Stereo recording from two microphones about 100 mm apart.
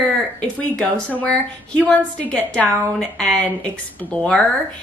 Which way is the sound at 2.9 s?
10° left (ahead or behind).